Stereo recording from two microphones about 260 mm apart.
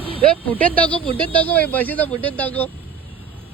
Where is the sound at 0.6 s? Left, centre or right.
Centre.